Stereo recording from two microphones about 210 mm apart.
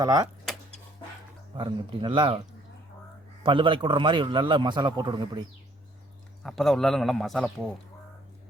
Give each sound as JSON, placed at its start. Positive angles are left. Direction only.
{"t": 0.0, "sound": "speech", "side_deg": -15}
{"t": 1.5, "sound": "a man's voice", "side_deg": -25}
{"t": 3.4, "sound": "a man's voice", "side_deg": -25}
{"t": 6.4, "sound": "a man's voice", "side_deg": 0}